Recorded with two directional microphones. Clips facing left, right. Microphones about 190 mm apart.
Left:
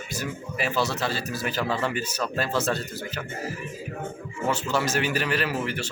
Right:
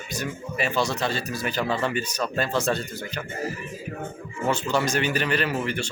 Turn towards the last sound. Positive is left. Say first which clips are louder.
# right 2 dB
turn(degrees=5)  # may be behind; listen again after turning